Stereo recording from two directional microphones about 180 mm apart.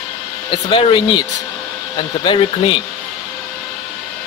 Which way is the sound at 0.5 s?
25° left (ahead or behind).